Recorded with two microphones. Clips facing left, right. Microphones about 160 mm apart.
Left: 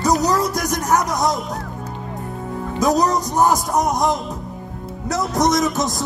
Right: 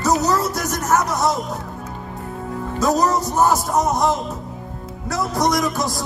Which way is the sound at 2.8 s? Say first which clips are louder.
Left 1 dB; 15° left (ahead or behind).